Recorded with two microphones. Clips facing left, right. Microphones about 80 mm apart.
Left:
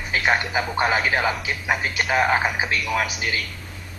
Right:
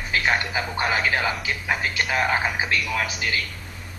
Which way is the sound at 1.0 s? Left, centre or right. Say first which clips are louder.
Left 2 dB; left.